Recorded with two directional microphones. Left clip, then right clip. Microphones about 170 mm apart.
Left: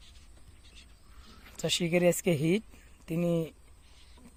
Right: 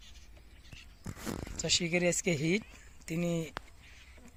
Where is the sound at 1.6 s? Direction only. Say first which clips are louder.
Left 3 dB; 35° left (ahead or behind).